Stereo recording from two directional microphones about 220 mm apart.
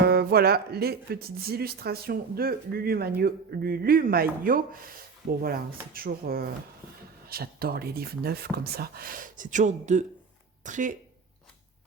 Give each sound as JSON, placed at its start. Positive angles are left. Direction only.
{"t": 0.0, "sound": "speech", "side_deg": -45}